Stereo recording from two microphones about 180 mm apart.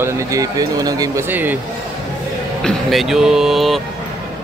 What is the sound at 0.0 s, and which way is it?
Speech, 20° right (ahead or behind).